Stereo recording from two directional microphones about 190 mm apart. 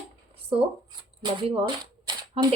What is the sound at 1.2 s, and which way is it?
Speech, 25° right (ahead or behind).